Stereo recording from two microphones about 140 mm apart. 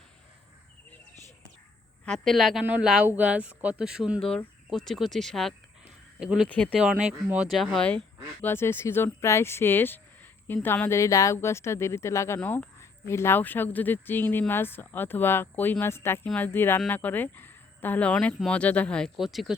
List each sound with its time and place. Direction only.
2.0 s speech: 5° left (ahead or behind)
6.5 s speech: 10° left (ahead or behind)
6.7 s speech: 5° right (ahead or behind)